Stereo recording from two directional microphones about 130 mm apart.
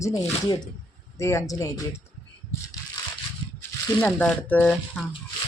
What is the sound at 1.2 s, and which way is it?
Speech, 20° left (ahead or behind).